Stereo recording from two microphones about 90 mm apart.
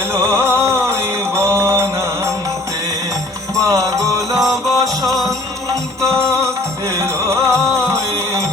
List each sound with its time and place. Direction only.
0.1 s music: 30° right (ahead or behind)
3.5 s music: 35° right (ahead or behind)